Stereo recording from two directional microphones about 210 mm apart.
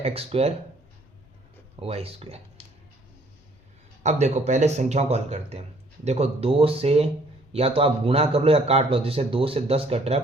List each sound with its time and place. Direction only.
0.0 s speech: 30° right (ahead or behind)
1.8 s speech: 30° right (ahead or behind)
4.0 s speech: 35° right (ahead or behind)